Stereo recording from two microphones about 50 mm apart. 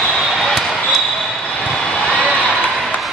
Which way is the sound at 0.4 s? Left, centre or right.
Centre.